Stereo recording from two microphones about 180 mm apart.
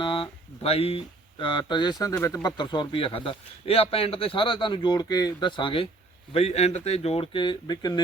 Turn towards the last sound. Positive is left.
turn(degrees=25)  # may be behind; listen again after turning